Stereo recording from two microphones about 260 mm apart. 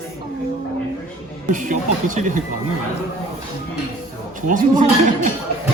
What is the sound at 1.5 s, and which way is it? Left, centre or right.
Speech, right.